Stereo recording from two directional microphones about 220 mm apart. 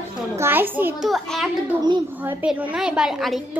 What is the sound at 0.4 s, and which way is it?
A child's voice, 10° right (ahead or behind).